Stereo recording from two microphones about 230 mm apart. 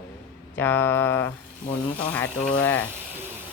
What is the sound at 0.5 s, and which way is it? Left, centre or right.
Speech, centre.